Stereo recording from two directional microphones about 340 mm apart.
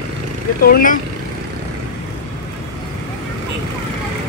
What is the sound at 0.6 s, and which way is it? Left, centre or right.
Speech, left.